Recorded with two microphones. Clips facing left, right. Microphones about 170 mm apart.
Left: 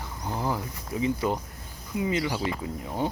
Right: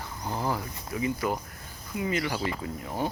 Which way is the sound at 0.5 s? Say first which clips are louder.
Left 1 dB; 25° left (ahead or behind).